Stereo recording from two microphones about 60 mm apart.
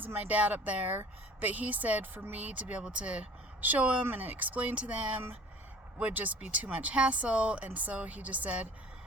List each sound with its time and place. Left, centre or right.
0.0 s speech: right